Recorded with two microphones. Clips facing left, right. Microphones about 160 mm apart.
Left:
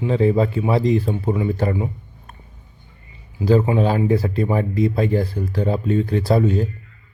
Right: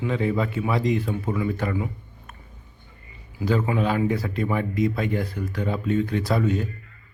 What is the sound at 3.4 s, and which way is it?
Speech, 30° left (ahead or behind).